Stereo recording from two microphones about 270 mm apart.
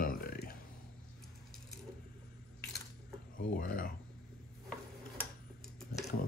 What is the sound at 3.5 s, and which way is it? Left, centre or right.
Speech, left.